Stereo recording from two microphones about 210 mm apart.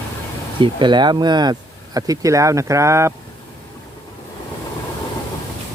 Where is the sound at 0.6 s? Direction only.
20° right (ahead or behind).